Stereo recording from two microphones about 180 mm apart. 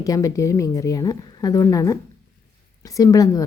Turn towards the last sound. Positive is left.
turn(degrees=20)  # may be behind; listen again after turning